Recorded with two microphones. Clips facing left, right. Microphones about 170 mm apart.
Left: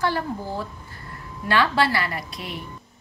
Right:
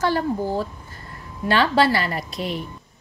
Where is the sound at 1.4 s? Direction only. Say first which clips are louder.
Right 3 dB; 30° right (ahead or behind).